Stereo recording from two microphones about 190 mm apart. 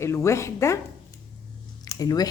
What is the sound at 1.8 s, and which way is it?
Speech, 20° left (ahead or behind).